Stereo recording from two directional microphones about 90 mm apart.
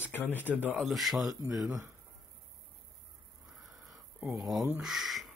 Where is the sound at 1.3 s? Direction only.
40° right (ahead or behind).